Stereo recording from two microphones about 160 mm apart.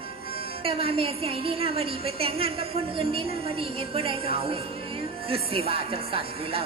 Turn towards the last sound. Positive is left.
turn(degrees=-35)  # may be behind; listen again after turning